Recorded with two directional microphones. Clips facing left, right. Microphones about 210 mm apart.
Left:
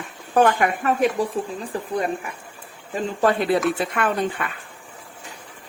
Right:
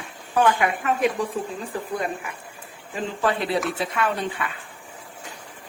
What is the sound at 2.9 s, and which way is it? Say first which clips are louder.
Speech: left 4 dB; 50° left (ahead or behind).